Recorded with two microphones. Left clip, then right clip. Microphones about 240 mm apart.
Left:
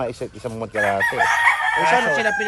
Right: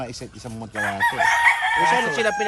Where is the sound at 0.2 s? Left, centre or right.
Left.